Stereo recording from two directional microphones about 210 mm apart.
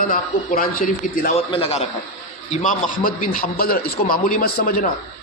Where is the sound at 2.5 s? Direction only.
40° left (ahead or behind).